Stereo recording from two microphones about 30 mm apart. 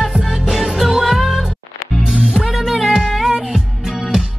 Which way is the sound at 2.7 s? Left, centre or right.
Centre.